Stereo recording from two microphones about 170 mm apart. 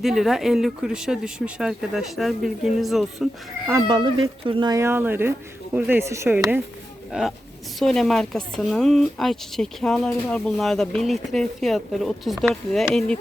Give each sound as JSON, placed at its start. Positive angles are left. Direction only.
{"t": 0.0, "sound": "speech", "side_deg": 0}
{"t": 3.7, "sound": "speech", "side_deg": -20}
{"t": 7.1, "sound": "speech", "side_deg": 0}